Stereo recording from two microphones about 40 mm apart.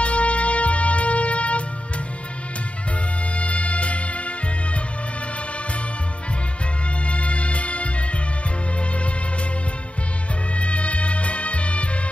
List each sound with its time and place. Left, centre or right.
0.0 s wind instrument: left
3.3 s music: left
7.1 s music: left
10.5 s music: left